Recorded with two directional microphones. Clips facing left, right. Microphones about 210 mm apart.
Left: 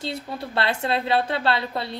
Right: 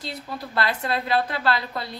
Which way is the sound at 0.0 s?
25° left (ahead or behind).